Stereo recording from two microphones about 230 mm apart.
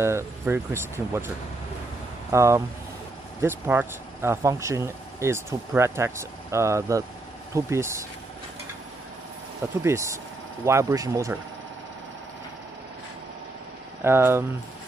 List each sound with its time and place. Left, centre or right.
0.0 s speech: centre
2.3 s speech: centre
9.8 s speech: centre
14.0 s speech: centre